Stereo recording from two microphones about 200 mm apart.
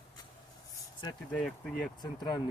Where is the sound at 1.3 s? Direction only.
5° left (ahead or behind).